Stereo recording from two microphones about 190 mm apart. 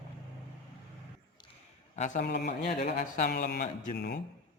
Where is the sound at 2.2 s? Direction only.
60° left (ahead or behind).